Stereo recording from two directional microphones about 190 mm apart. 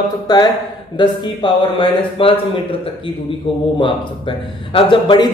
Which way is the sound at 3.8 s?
25° left (ahead or behind).